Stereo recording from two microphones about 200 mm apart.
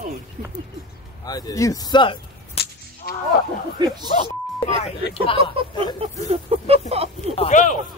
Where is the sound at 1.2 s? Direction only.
20° left (ahead or behind).